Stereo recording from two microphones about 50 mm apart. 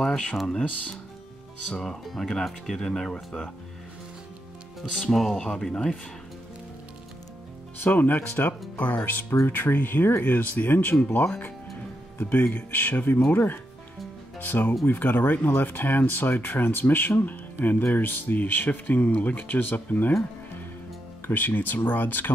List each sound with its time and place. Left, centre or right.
0.0 s music: centre
1.8 s speech: centre
5.1 s speech: centre
5.4 s speech: centre
7.8 s speech: left
21.3 s speech: left